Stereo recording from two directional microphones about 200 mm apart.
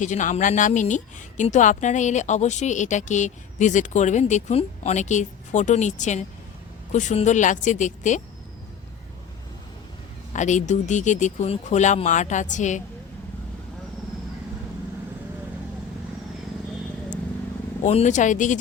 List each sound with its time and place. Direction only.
0.0 s speech: 40° left (ahead or behind)
10.3 s speech: 35° left (ahead or behind)
17.8 s speech: 35° left (ahead or behind)